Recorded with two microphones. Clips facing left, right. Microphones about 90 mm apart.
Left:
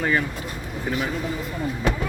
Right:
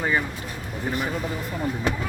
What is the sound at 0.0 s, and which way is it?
Speech, 15° right (ahead or behind).